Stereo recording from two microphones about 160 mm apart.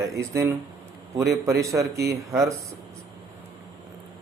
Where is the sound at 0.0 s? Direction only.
15° right (ahead or behind).